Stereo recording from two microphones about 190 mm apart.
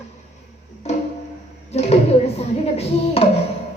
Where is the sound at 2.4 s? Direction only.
35° left (ahead or behind).